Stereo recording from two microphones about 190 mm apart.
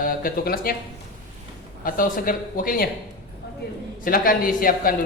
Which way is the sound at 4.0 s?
50° left (ahead or behind).